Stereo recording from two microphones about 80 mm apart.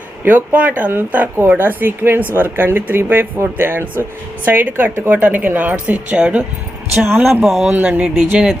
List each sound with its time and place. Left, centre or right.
0.3 s speech: right
7.0 s speech: right